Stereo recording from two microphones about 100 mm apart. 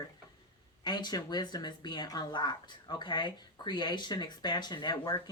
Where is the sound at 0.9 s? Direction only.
45° left (ahead or behind).